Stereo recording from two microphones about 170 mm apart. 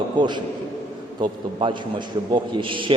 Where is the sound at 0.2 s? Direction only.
25° right (ahead or behind).